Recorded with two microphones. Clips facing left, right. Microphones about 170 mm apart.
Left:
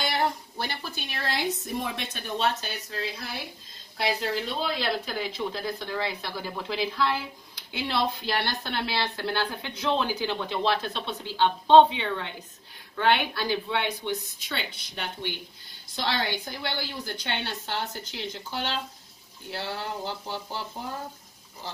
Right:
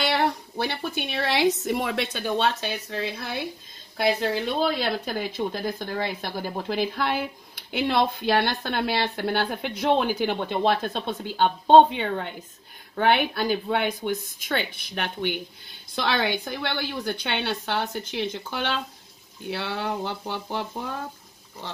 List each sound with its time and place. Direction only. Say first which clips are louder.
0.7 s a woman's voice: right 7 dB; 60° right (ahead or behind)